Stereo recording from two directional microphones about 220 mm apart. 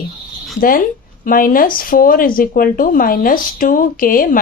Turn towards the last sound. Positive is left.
turn(degrees=40)  # may be behind; listen again after turning